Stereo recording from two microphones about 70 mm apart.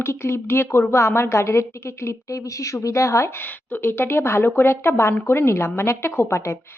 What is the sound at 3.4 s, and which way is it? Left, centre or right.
Speech, left.